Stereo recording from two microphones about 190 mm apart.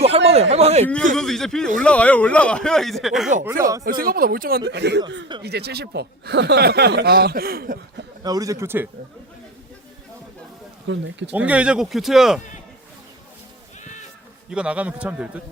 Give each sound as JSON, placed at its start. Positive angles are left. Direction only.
{"t": 0.0, "sound": "speech", "side_deg": -35}
{"t": 1.1, "sound": "speech", "side_deg": 0}
{"t": 3.8, "sound": "speech", "side_deg": -50}
{"t": 8.2, "sound": "a man's voice", "side_deg": -20}
{"t": 10.8, "sound": "speech", "side_deg": -70}
{"t": 11.3, "sound": "speech", "side_deg": -5}
{"t": 14.5, "sound": "a man's voice", "side_deg": -5}